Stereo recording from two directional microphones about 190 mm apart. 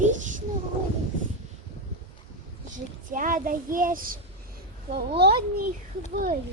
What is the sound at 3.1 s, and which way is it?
A child's voice, 45° right (ahead or behind).